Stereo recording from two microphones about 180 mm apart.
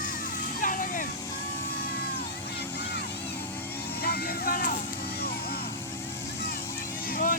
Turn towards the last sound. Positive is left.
turn(degrees=50)  # may be behind; listen again after turning